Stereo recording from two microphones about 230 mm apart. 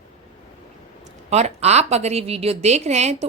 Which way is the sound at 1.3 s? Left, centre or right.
Right.